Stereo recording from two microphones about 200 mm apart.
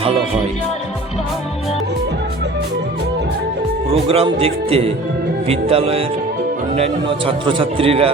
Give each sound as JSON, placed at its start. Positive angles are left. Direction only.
{"t": 3.8, "sound": "a man's voice", "side_deg": -30}